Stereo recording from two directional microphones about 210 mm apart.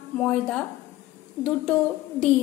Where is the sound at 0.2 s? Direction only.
5° left (ahead or behind).